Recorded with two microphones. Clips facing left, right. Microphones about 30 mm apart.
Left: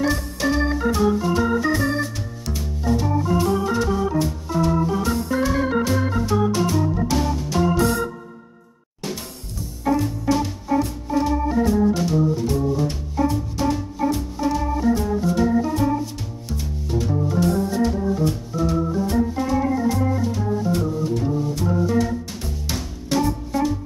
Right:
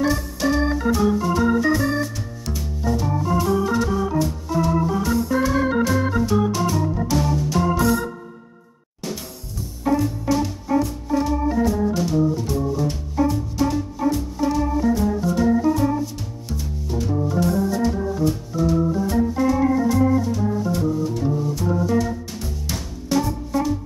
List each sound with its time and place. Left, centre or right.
0.1 s organ: centre
2.5 s music: centre
3.7 s organ: centre
9.8 s music: centre
11.1 s organ: centre
13.1 s music: centre
14.4 s organ: centre
20.3 s music: centre
23.0 s music: left